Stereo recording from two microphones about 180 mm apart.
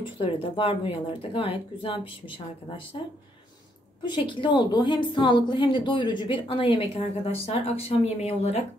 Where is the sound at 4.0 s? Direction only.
25° left (ahead or behind).